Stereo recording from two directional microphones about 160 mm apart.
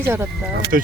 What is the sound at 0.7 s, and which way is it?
Speech, 60° right (ahead or behind).